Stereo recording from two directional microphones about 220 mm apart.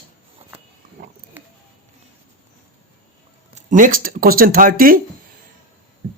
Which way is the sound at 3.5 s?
35° right (ahead or behind).